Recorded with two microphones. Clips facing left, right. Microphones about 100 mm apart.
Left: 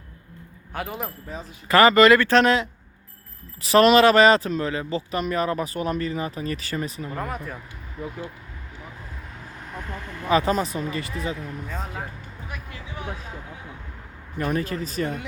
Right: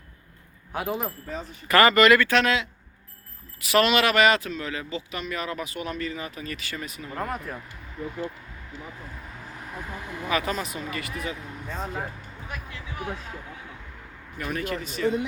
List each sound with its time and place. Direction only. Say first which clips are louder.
0.7 s speech: right 2 dB; centre (ahead or behind)
1.6 s speech: left 3 dB; 25° left (ahead or behind)
7.1 s speech: even; centre (ahead or behind)
8.0 s speech: left 1 dB; 10° left (ahead or behind)
9.6 s speech: left 2 dB; 5° right (ahead or behind)
10.2 s speech: left 7 dB; 30° left (ahead or behind)
11.7 s speech: right 4 dB; centre (ahead or behind)
14.3 s speech: left 4 dB; 35° left (ahead or behind)